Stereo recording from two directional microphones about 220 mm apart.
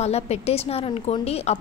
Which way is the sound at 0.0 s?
30° left (ahead or behind).